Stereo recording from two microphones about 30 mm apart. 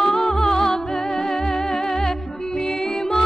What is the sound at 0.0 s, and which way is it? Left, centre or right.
Music, left.